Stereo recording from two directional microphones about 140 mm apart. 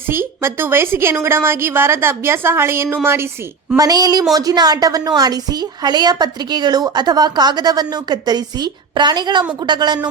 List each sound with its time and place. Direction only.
0.1 s a woman's voice: 15° right (ahead or behind)
3.8 s a woman's voice: 25° right (ahead or behind)